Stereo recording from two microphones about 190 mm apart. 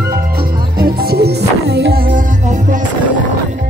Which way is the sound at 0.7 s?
55° right (ahead or behind).